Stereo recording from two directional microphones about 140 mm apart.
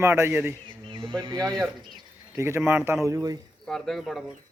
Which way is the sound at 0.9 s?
35° right (ahead or behind).